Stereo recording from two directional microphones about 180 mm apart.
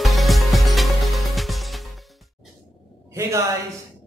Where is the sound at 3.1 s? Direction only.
15° right (ahead or behind).